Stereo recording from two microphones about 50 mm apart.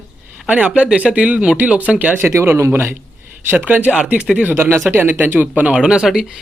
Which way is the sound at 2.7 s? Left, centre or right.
Right.